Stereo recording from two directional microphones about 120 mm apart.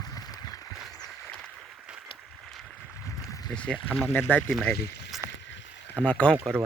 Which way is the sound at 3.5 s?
10° left (ahead or behind).